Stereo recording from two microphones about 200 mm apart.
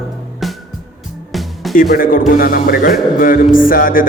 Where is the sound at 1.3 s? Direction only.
Centre (ahead or behind).